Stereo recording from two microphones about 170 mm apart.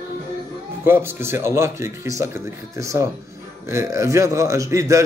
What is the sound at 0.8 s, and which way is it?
A man's voice, 15° right (ahead or behind).